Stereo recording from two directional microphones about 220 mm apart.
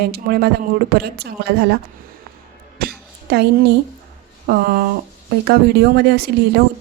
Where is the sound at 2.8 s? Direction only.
45° right (ahead or behind).